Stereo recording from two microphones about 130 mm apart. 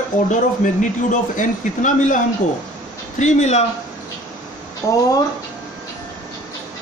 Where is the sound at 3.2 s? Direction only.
60° left (ahead or behind).